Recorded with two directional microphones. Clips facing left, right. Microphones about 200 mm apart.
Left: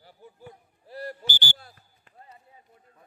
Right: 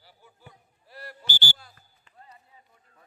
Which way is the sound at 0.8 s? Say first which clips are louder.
Left 8 dB; 40° left (ahead or behind).